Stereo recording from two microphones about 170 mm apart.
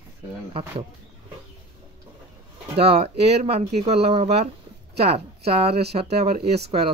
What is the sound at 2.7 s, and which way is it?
Speech, 40° right (ahead or behind).